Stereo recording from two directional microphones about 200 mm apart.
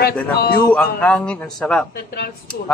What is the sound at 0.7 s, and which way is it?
Speech, 5° left (ahead or behind).